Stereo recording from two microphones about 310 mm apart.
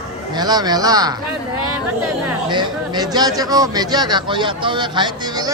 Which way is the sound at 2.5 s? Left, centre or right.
Centre.